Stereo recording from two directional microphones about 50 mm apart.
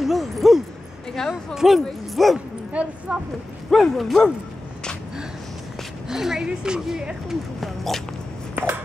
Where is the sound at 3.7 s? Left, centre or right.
Centre.